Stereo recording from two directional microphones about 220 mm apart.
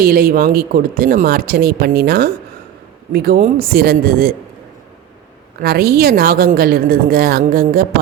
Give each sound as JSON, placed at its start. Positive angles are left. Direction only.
{"t": 0.0, "sound": "speech", "side_deg": -40}
{"t": 5.5, "sound": "speech", "side_deg": -45}